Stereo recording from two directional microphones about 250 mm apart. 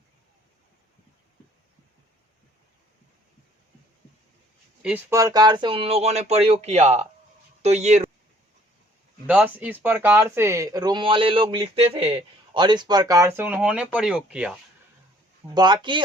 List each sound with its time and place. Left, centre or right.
4.8 s speech: centre; by 8.0 s right
9.2 s speech: centre
15.5 s speech: centre